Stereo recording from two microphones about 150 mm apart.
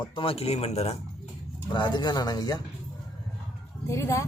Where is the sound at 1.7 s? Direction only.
30° left (ahead or behind).